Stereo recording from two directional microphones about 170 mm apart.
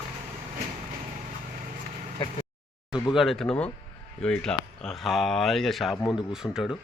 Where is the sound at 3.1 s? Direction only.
Centre (ahead or behind).